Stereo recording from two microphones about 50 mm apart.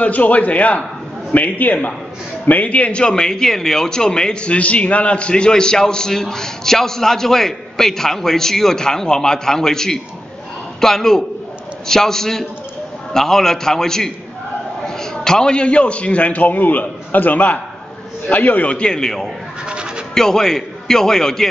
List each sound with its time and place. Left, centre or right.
0.0 s a man's voice: left; by 21.5 s centre